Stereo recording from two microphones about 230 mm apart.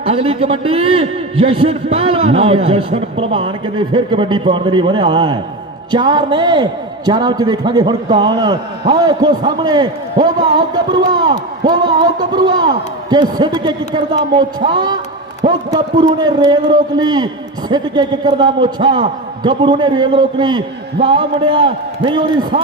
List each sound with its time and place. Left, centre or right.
0.0 s a man's voice: right